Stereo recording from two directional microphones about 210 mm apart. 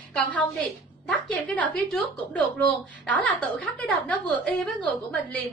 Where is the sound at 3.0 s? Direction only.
5° left (ahead or behind).